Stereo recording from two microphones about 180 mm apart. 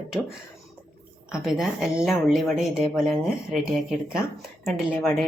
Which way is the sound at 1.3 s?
5° right (ahead or behind).